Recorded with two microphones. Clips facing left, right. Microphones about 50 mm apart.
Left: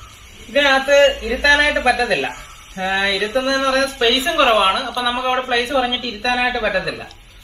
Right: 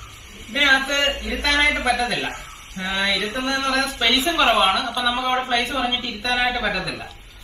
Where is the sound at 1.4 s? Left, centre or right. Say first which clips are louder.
Left 5 dB; left.